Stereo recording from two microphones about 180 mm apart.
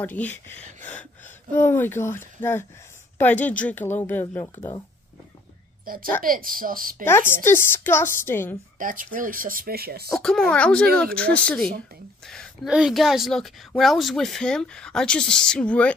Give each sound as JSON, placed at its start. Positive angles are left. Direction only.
{"t": 0.0, "sound": "speech", "side_deg": 10}
{"t": 5.9, "sound": "speech", "side_deg": -50}
{"t": 7.1, "sound": "speech", "side_deg": 15}
{"t": 8.7, "sound": "speech", "side_deg": -50}
{"t": 10.1, "sound": "a woman's voice", "side_deg": 5}